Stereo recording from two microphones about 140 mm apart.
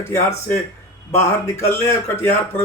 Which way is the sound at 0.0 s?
20° left (ahead or behind).